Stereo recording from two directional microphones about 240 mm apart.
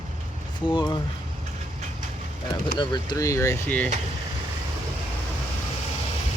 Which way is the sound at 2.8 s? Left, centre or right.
Centre.